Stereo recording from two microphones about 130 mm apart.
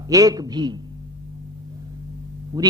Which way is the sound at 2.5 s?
30° right (ahead or behind).